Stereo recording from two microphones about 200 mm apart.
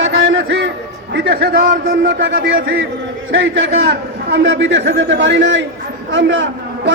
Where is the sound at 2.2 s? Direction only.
65° right (ahead or behind).